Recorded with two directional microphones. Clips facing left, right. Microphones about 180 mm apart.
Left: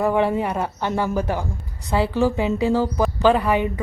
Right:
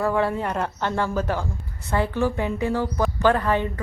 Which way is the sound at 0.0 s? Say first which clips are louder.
Left 3 dB; 15° left (ahead or behind).